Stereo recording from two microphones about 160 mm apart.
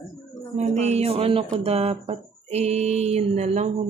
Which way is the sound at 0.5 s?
45° right (ahead or behind).